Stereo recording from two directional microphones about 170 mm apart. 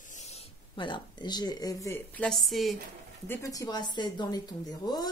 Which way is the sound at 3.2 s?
15° left (ahead or behind).